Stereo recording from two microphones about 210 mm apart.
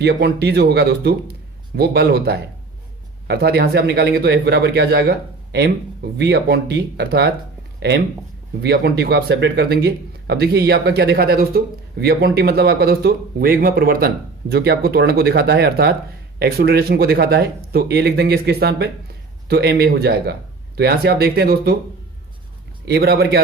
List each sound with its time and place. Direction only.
0.0 s a man's voice: 50° right (ahead or behind)
22.9 s a man's voice: 50° right (ahead or behind)